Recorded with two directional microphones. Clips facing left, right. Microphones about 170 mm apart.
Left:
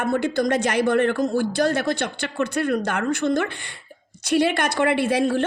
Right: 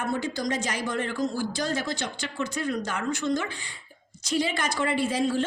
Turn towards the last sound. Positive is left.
turn(degrees=65)  # may be behind; listen again after turning